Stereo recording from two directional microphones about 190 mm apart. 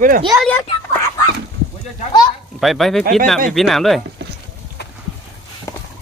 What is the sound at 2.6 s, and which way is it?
Speech, centre (ahead or behind).